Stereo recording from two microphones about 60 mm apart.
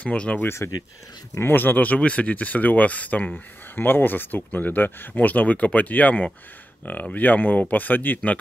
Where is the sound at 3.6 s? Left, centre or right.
Left.